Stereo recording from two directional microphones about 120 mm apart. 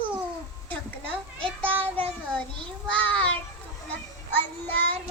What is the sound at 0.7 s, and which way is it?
A child's voice, 10° left (ahead or behind).